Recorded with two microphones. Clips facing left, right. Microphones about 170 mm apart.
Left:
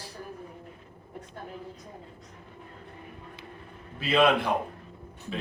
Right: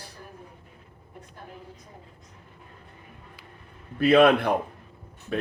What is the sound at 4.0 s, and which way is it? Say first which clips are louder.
Speech: right 6 dB; 55° right (ahead or behind).